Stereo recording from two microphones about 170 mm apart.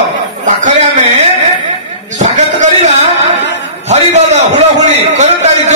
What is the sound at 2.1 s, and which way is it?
A man's voice, 45° right (ahead or behind).